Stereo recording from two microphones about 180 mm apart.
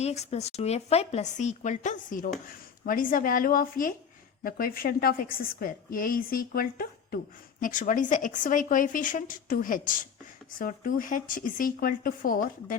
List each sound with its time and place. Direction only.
0.0 s a woman's voice: 35° left (ahead or behind)